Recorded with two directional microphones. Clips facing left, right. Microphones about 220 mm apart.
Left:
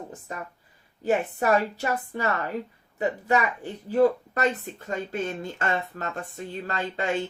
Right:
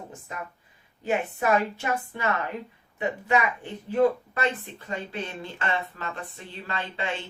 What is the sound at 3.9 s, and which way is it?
Speech, 40° left (ahead or behind).